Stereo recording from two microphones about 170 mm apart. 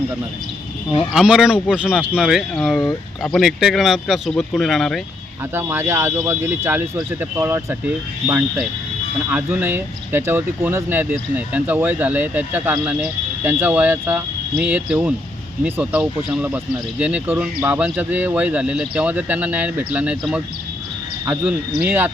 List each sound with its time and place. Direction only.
1.1 s speech: 5° right (ahead or behind)
5.5 s speech: 15° right (ahead or behind)
21.8 s speech: 10° right (ahead or behind)